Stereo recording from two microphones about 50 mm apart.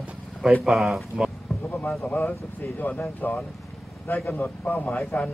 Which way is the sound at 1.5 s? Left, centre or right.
Left.